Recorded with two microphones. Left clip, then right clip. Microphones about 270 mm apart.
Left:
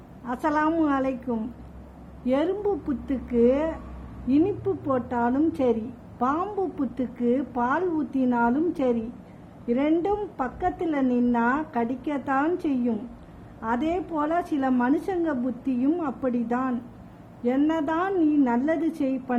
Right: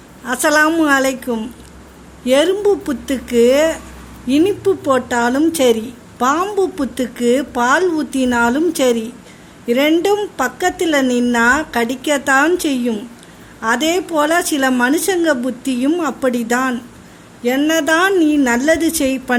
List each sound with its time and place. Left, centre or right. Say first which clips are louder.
0.3 s a woman's voice: right 11 dB; centre